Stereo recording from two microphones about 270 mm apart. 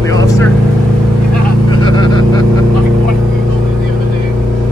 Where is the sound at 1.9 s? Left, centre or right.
Centre.